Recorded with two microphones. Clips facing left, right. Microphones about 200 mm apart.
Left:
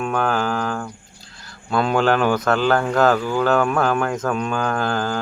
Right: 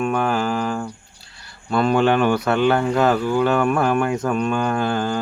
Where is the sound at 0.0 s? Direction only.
5° right (ahead or behind).